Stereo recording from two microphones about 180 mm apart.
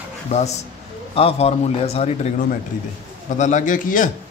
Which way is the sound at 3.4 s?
45° left (ahead or behind).